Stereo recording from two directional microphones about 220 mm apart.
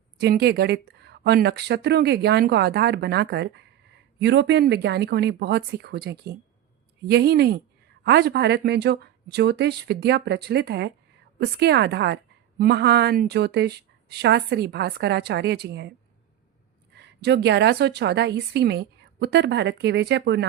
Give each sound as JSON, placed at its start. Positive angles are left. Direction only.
{"t": 0.2, "sound": "a woman's voice", "side_deg": -45}
{"t": 16.9, "sound": "a woman's voice", "side_deg": -50}